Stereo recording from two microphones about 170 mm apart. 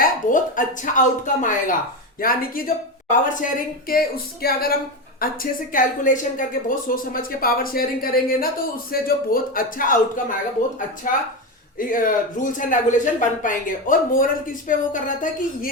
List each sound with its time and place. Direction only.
0.0 s speech: 50° left (ahead or behind)